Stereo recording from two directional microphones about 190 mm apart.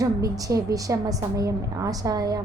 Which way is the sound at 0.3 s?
20° right (ahead or behind).